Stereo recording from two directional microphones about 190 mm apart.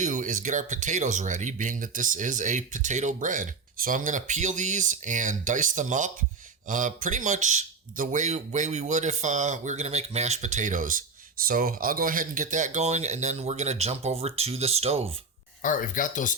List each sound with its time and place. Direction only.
0.0 s speech: 40° right (ahead or behind)
15.6 s speech: 45° left (ahead or behind)